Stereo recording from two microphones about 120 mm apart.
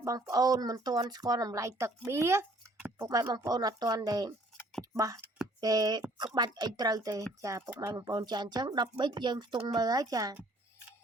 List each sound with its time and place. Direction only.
0.0 s speech: 25° right (ahead or behind)
2.7 s a sound: 15° right (ahead or behind)
3.1 s speech: 35° right (ahead or behind)
4.8 s a sound: 30° right (ahead or behind)
5.5 s speech: 30° right (ahead or behind)
9.8 s speech: 30° right (ahead or behind)